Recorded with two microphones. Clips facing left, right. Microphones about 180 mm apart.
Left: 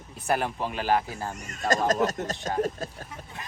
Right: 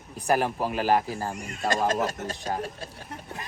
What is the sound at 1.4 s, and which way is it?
Speech, 45° left (ahead or behind).